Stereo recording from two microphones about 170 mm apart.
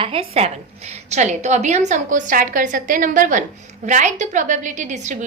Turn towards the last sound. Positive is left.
turn(degrees=-45)  # may be behind; listen again after turning